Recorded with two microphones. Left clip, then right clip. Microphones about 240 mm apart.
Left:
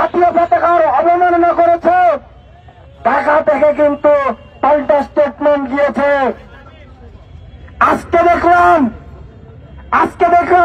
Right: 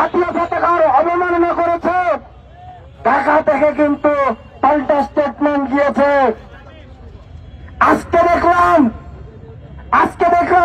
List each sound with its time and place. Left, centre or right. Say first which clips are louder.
0.0 s a sound: left 4 dB; left
3.0 s a man's voice: left 1 dB; left
7.8 s a man's voice: left 1 dB; left
9.8 s a man's voice: left 1 dB; left